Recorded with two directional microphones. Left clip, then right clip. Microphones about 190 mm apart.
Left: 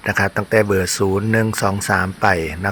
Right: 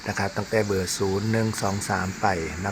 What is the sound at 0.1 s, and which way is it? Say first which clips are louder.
Speech: left 9 dB; 20° left (ahead or behind).